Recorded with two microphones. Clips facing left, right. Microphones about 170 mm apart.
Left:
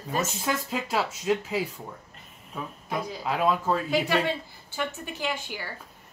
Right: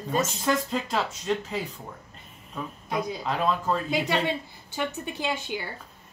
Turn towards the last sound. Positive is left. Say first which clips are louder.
# right 2 dB
turn(degrees=-20)  # may be behind; listen again after turning